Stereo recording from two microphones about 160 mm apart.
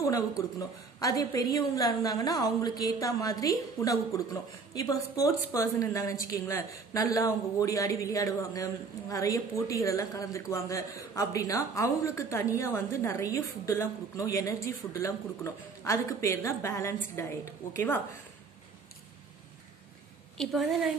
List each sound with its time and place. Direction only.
0.6 s a woman's voice: 20° left (ahead or behind)
20.3 s a woman's voice: centre (ahead or behind)